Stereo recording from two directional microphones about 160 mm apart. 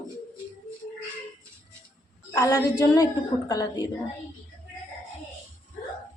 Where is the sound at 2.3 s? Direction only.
20° left (ahead or behind).